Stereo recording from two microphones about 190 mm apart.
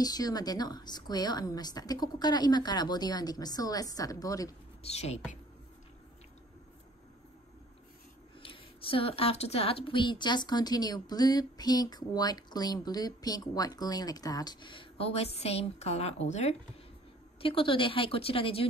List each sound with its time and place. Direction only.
0.0 s speech: 20° left (ahead or behind)
4.8 s a woman's voice: 35° left (ahead or behind)
8.4 s a woman's voice: 30° left (ahead or behind)